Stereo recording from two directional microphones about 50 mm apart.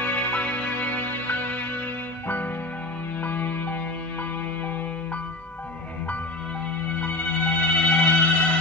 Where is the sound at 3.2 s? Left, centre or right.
Left.